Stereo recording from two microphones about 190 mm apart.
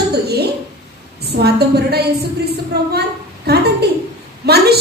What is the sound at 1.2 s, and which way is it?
A woman's voice, 60° right (ahead or behind).